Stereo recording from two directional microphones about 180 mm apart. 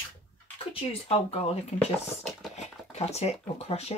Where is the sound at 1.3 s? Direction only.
35° left (ahead or behind).